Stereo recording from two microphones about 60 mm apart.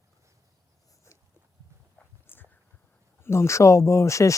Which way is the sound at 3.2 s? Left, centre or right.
Left.